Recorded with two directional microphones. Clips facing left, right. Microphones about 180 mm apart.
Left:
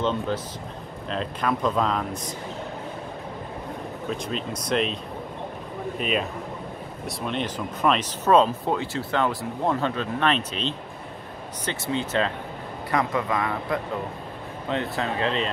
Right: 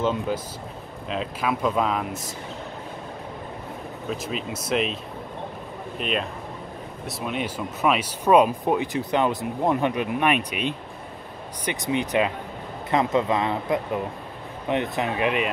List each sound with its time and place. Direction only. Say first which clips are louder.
0.0 s speech: right 1 dB; 10° right (ahead or behind)
4.1 s speech: even; 5° right (ahead or behind)
5.9 s speech: even; centre (ahead or behind); by 15.5 s 15° right (ahead or behind)